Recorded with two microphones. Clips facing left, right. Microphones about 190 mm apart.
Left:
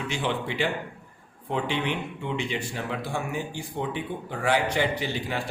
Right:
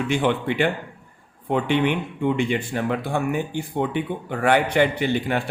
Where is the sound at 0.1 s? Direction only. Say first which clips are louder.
Right 7 dB; 55° right (ahead or behind).